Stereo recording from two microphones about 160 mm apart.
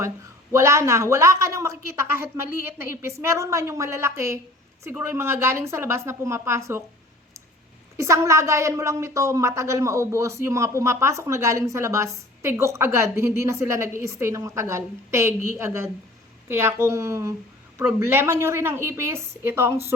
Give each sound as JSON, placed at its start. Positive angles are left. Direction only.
{"t": 0.5, "sound": "a woman's voice", "side_deg": -15}
{"t": 7.9, "sound": "a woman's voice", "side_deg": -20}